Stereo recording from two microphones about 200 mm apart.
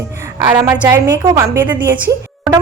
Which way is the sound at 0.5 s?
15° right (ahead or behind).